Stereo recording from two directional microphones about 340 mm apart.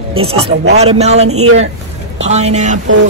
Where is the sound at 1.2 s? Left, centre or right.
Right.